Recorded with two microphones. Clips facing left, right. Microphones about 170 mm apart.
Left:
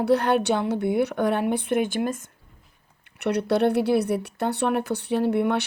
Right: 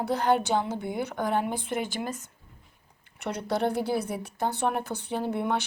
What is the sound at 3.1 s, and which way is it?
Speech, 70° left (ahead or behind).